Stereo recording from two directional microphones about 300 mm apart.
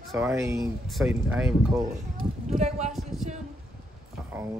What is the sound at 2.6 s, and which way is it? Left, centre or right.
Speech, right.